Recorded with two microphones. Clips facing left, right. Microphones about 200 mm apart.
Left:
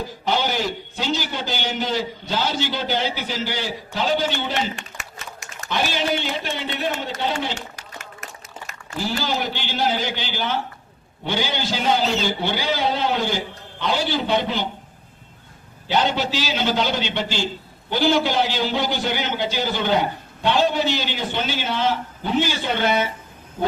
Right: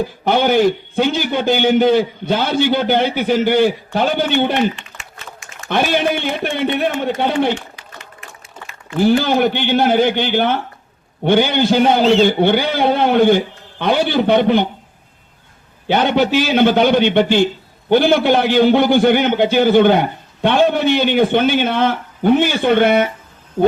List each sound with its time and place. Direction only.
0.3 s a man's voice: 55° right (ahead or behind)
7.8 s applause: 45° left (ahead or behind)
9.0 s a man's voice: 55° right (ahead or behind)
15.9 s a man's voice: 60° right (ahead or behind)